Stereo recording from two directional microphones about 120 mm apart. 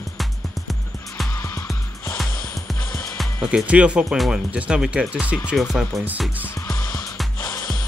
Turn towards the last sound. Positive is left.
turn(degrees=0)  # may be behind; listen again after turning